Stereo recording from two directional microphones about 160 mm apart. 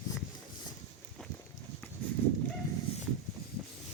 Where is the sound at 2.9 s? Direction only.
35° left (ahead or behind).